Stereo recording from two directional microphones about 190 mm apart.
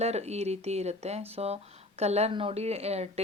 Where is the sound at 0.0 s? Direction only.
35° right (ahead or behind).